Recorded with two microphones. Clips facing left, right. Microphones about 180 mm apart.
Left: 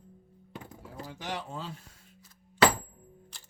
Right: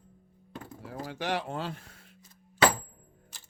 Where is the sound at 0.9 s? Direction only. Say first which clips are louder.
Right 6 dB; 75° right (ahead or behind).